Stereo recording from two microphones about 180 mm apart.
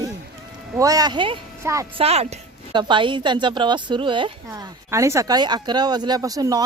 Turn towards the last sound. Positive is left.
turn(degrees=-20)  # may be behind; listen again after turning